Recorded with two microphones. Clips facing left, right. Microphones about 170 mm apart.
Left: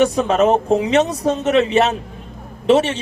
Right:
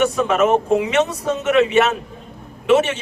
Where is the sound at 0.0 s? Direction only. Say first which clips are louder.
Left 2 dB; 30° left (ahead or behind).